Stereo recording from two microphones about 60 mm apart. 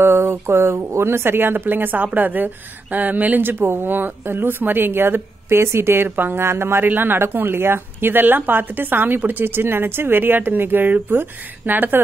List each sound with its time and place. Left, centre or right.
0.0 s a woman's voice: right
6.0 s a woman's voice: right